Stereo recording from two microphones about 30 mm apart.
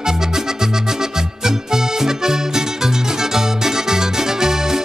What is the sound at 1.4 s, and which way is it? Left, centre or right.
Music, centre.